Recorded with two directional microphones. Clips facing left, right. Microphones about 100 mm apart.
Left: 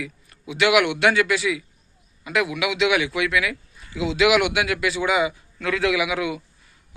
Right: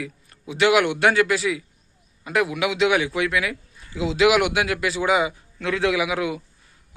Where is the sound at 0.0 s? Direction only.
35° right (ahead or behind).